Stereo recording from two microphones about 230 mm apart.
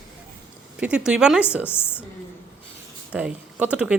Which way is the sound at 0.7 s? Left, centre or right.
Centre.